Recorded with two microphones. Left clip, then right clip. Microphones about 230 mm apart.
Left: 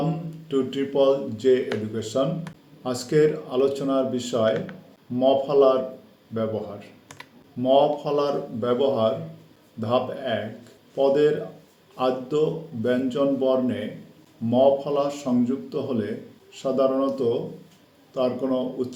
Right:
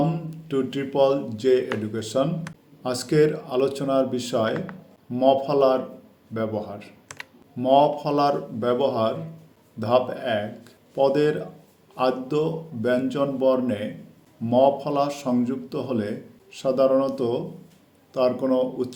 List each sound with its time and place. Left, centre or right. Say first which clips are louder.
0.4 s a man's voice: left 1 dB; right